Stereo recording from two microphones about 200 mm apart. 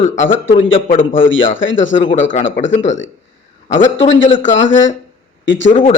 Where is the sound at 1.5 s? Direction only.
70° left (ahead or behind).